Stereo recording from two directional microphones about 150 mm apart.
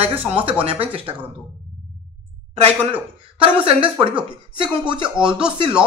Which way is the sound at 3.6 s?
35° right (ahead or behind).